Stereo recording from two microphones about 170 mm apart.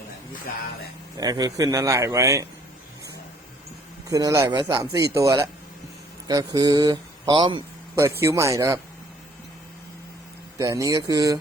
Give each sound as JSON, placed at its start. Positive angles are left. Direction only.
{"t": 1.2, "sound": "a man's voice", "side_deg": -20}
{"t": 4.1, "sound": "a man's voice", "side_deg": -20}
{"t": 8.2, "sound": "speech", "side_deg": -15}
{"t": 10.6, "sound": "a man's voice", "side_deg": -20}